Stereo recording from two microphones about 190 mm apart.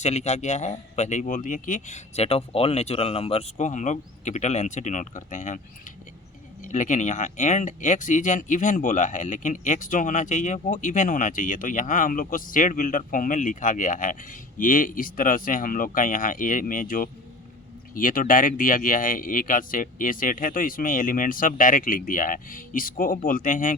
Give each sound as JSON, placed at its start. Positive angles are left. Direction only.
{"t": 0.0, "sound": "a man's voice", "side_deg": 35}
{"t": 6.6, "sound": "speech", "side_deg": 40}